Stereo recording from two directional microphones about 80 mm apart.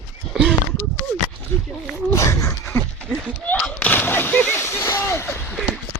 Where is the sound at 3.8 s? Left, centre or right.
Left.